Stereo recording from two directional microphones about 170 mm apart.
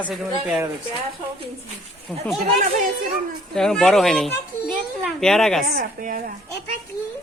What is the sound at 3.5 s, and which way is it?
Speech, 5° left (ahead or behind).